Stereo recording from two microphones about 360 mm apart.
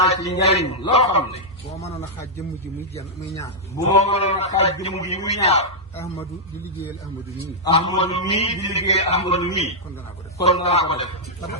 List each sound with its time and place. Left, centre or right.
0.0 s a man's voice: centre
7.6 s a man's voice: centre